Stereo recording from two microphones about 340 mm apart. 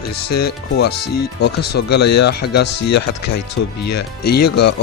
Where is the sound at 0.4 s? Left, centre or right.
Left.